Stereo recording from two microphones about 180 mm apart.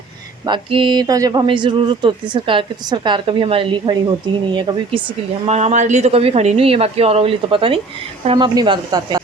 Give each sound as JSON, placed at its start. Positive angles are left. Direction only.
{"t": 0.4, "sound": "speech", "side_deg": -25}
{"t": 5.5, "sound": "speech", "side_deg": -40}